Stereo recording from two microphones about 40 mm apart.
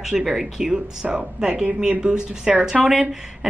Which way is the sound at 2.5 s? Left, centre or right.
Right.